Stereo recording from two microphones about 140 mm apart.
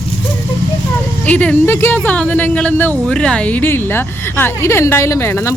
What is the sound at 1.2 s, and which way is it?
Speech, 10° left (ahead or behind).